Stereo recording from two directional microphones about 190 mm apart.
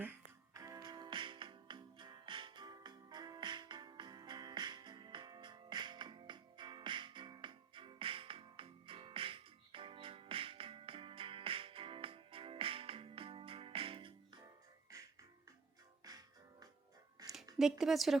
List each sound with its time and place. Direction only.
0.0 s music: 15° right (ahead or behind)
16.0 s music: 20° right (ahead or behind)
17.2 s a sound: 20° right (ahead or behind)
17.6 s speech: centre (ahead or behind)